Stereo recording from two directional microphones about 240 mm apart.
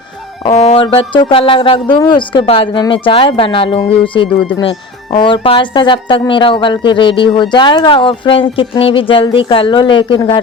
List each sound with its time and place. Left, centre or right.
0.4 s speech: left